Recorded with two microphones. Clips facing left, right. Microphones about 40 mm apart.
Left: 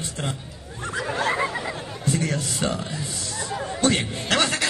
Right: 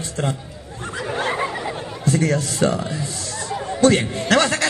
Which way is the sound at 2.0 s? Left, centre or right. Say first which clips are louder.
Right 6 dB; right.